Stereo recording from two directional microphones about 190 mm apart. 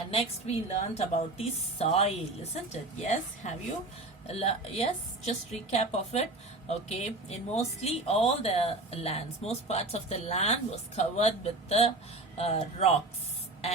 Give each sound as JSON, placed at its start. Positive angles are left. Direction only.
{"t": 0.1, "sound": "speech", "side_deg": 30}